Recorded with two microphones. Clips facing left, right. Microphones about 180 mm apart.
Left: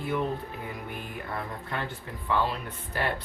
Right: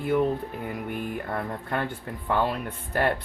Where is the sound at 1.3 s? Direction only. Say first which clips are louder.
Right 3 dB; 50° right (ahead or behind).